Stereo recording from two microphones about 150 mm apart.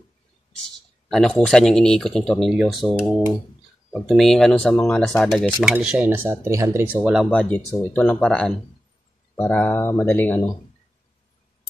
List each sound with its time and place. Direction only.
1.0 s speech: 5° left (ahead or behind)
7.2 s speech: 10° left (ahead or behind)
9.4 s speech: 15° left (ahead or behind)